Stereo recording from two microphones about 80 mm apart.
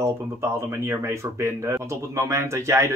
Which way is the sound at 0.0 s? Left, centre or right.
Right.